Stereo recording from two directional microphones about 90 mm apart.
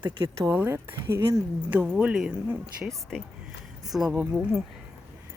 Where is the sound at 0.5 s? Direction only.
25° right (ahead or behind).